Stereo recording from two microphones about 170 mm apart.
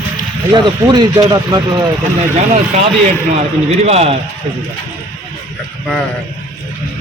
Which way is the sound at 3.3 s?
40° right (ahead or behind).